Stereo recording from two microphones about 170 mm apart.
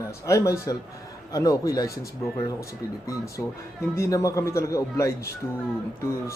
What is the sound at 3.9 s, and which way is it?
Speech, 15° left (ahead or behind).